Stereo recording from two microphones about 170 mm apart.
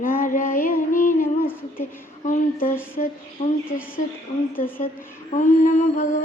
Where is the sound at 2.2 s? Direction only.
50° left (ahead or behind).